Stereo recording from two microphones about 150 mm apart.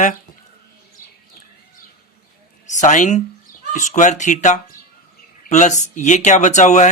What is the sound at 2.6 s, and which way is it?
A woman's voice, 55° left (ahead or behind).